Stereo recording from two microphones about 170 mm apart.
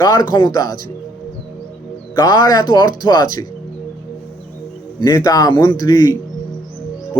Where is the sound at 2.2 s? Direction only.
20° left (ahead or behind).